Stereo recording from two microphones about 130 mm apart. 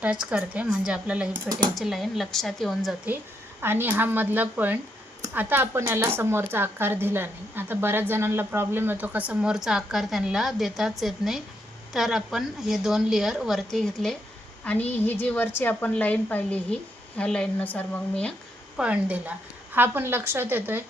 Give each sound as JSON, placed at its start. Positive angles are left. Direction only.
{"t": 0.0, "sound": "a woman's voice", "side_deg": -10}
{"t": 3.6, "sound": "a woman's voice", "side_deg": -15}
{"t": 18.8, "sound": "speech", "side_deg": -10}